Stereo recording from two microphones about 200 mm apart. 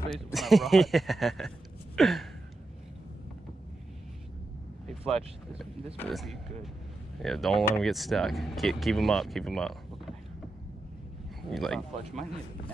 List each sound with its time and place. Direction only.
0.1 s speech: centre (ahead or behind)
2.0 s a sound: centre (ahead or behind)
5.0 s speech: 30° right (ahead or behind)
5.9 s speech: centre (ahead or behind)
11.5 s speech: centre (ahead or behind)